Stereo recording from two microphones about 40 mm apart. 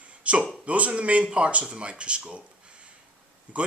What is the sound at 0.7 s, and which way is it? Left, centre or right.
A man's voice, right.